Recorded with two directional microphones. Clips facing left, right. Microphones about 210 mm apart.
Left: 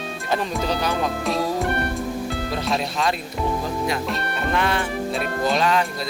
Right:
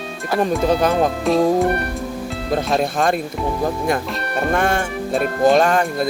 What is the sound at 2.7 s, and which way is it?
Speech, 50° right (ahead or behind).